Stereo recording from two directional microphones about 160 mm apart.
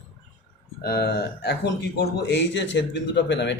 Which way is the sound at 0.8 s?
80° left.